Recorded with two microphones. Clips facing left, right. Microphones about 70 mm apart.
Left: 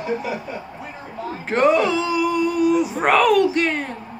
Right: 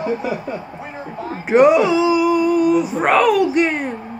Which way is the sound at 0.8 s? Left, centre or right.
Right.